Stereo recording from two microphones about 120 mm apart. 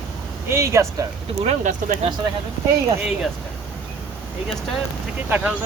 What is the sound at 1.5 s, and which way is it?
Speech, 75° right (ahead or behind).